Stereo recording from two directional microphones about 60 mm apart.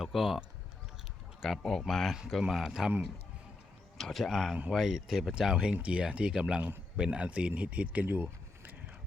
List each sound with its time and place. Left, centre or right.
0.0 s speech: centre
1.5 s speech: centre
2.5 s speech: centre
3.9 s speech: centre; by 8.0 s right
8.0 s a sound: right